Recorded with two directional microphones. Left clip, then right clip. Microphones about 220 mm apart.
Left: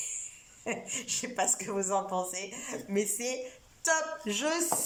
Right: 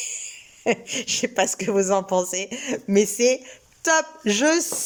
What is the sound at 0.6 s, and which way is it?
A woman's voice, 40° right (ahead or behind).